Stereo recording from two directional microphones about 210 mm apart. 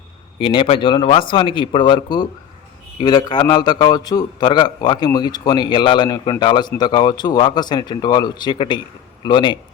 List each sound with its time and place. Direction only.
0.3 s a man's voice: 25° left (ahead or behind)